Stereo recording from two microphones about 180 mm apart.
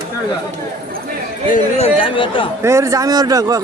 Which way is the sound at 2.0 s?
30° left (ahead or behind).